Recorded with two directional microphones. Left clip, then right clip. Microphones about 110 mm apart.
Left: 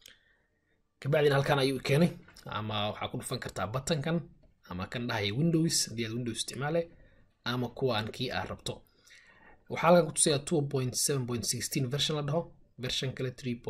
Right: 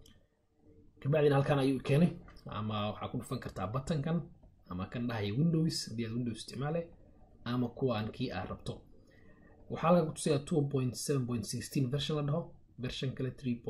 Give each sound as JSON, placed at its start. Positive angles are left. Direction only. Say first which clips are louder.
{"t": 0.9, "sound": "speech", "louder": "left 3 dB", "side_deg": 20}